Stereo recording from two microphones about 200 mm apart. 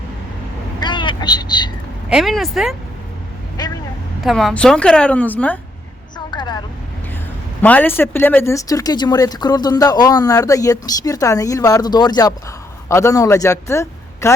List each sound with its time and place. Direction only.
0.8 s vehicle: 25° left (ahead or behind)
2.0 s a woman's voice: centre (ahead or behind)
3.6 s speech: 20° left (ahead or behind)
4.2 s a woman's voice: centre (ahead or behind)
6.1 s vehicle: 20° left (ahead or behind)
7.6 s a man's voice: 10° left (ahead or behind)